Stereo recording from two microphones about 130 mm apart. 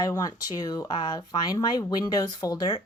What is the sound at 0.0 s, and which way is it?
Speech, 30° left (ahead or behind).